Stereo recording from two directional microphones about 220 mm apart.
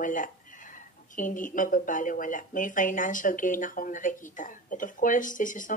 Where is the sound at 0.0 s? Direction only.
35° left (ahead or behind).